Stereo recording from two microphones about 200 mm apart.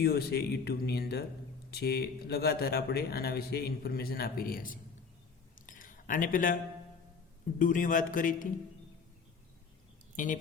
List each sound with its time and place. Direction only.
0.0 s speech: 50° left (ahead or behind)
5.5 s a sound: 40° left (ahead or behind)
7.6 s a man's voice: 40° left (ahead or behind)